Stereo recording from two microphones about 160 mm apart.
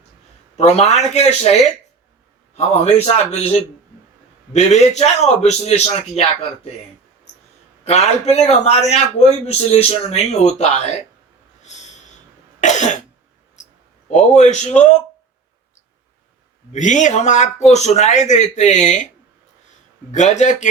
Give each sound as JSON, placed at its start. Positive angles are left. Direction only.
{"t": 0.5, "sound": "a man's voice", "side_deg": 45}
{"t": 4.5, "sound": "a man's voice", "side_deg": 45}
{"t": 7.9, "sound": "a man's voice", "side_deg": 45}
{"t": 11.6, "sound": "snort", "side_deg": 45}
{"t": 12.5, "sound": "cough", "side_deg": 50}
{"t": 14.1, "sound": "a man's voice", "side_deg": 50}
{"t": 16.7, "sound": "a man's voice", "side_deg": 50}
{"t": 20.1, "sound": "a man's voice", "side_deg": 45}